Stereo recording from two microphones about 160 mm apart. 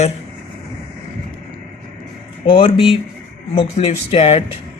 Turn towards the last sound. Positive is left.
turn(degrees=40)  # may be behind; listen again after turning